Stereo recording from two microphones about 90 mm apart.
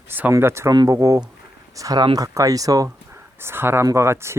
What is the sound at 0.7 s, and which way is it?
Speech, 45° right (ahead or behind).